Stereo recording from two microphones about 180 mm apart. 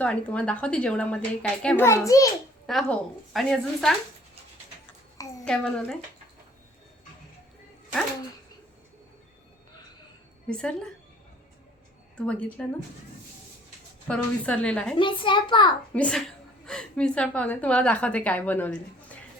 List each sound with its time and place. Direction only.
0.0 s a woman's voice: 10° left (ahead or behind)
2.6 s a woman's voice: centre (ahead or behind)
5.5 s a woman's voice: 5° left (ahead or behind)
10.5 s a woman's voice: 5° left (ahead or behind)
12.1 s a woman's voice: 5° left (ahead or behind)
14.1 s a woman's voice: 5° left (ahead or behind)
14.9 s a child's voice: 30° left (ahead or behind)
16.0 s a woman's voice: 5° left (ahead or behind)